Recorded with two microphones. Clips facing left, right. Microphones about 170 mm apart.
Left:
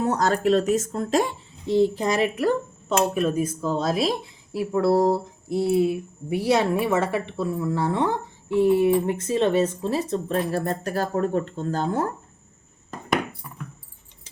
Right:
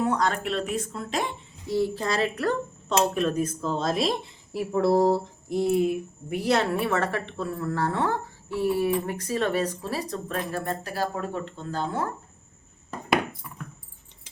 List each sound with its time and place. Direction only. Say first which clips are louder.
0.0 s speech: left 4 dB; 40° left (ahead or behind)
1.6 s a child's voice: left 5 dB; 20° left (ahead or behind); by 12.1 s 45° left (ahead or behind)